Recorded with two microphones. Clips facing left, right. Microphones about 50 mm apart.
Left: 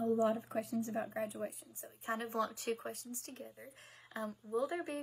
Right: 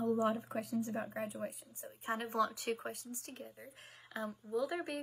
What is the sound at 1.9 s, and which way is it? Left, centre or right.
Speech, right.